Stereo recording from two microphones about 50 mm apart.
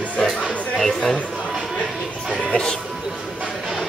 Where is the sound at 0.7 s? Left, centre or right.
Centre.